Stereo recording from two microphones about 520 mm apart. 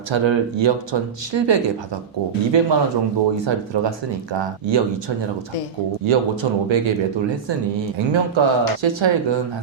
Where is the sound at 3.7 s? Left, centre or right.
Right.